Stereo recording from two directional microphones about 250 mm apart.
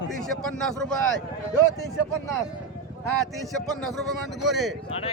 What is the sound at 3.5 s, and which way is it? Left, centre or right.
Speech, centre.